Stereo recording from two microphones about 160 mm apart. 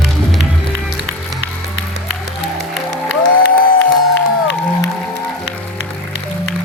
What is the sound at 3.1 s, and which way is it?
Music, 90° left.